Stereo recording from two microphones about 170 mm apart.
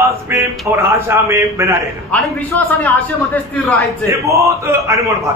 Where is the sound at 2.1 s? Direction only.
10° left (ahead or behind).